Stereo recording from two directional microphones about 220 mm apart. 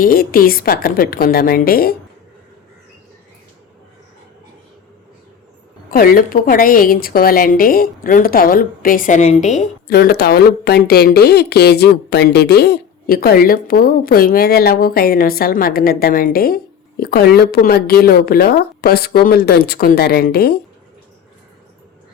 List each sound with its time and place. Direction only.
0.0 s speech: 40° left (ahead or behind)
5.9 s a woman's voice: 40° left (ahead or behind)
9.8 s speech: 45° left (ahead or behind)